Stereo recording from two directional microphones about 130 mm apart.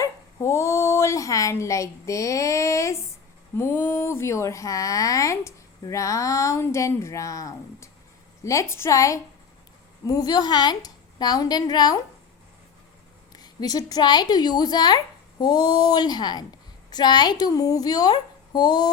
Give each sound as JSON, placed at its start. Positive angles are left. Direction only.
{"t": 0.0, "sound": "speech", "side_deg": 20}
{"t": 13.3, "sound": "speech", "side_deg": 30}